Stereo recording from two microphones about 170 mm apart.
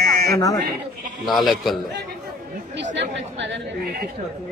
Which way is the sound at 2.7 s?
90° right.